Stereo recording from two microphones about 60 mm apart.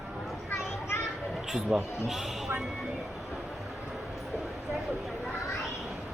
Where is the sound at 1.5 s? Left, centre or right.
Centre.